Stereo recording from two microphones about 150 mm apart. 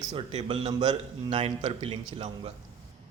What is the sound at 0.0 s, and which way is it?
Speech, 25° right (ahead or behind).